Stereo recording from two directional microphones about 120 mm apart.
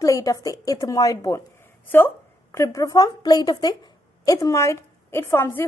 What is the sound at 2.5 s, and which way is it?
A woman's voice, 25° left (ahead or behind).